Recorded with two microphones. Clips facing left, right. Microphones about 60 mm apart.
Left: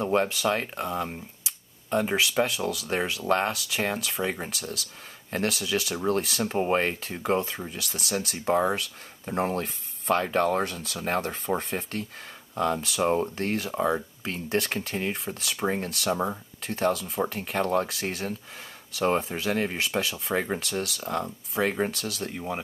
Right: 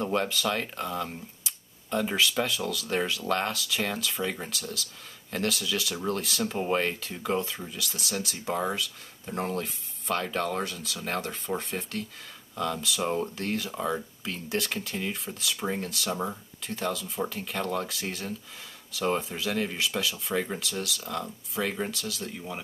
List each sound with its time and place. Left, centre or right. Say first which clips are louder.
0.0 s speech: left 3 dB; left
9.2 s speech: left 4 dB; left
10.6 s speech: left 3 dB; left
11.5 s speech: left 2 dB; left
13.4 s speech: left 3 dB; left
13.7 s speech: left 4 dB; left
14.2 s speech: left 4 dB; left
15.5 s speech: left 4 dB; left
16.6 s speech: left 5 dB; left
17.3 s speech: left 5 dB; left
20.6 s speech: left 3 dB; left
21.9 s speech: left 3 dB; left